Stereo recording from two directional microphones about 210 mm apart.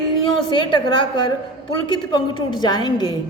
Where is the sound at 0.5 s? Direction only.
20° left (ahead or behind).